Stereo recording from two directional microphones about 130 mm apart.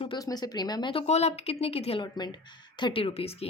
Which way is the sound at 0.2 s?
30° left (ahead or behind).